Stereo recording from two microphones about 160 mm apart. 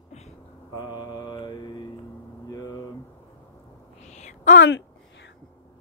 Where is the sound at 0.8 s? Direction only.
25° left (ahead or behind).